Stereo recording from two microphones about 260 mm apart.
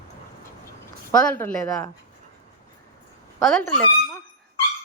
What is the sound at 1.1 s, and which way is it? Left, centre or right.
Speech, centre.